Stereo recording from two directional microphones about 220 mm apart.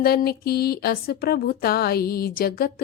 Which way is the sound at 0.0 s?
45° left (ahead or behind).